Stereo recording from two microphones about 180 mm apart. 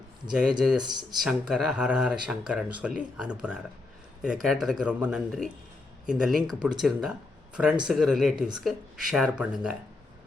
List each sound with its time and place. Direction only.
0.8 s speech: 25° right (ahead or behind)
1.2 s speech: centre (ahead or behind)